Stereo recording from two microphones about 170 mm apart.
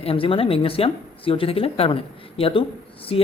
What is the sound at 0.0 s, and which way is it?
Speech, 35° left (ahead or behind).